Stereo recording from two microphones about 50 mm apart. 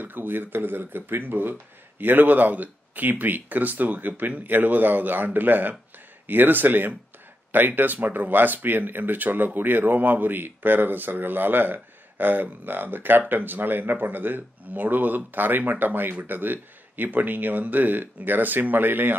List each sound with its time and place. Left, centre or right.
0.0 s speech: right